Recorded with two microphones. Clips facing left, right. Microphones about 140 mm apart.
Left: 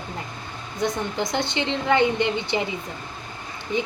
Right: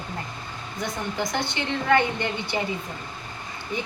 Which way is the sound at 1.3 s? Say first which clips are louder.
Left 3 dB; 20° left (ahead or behind).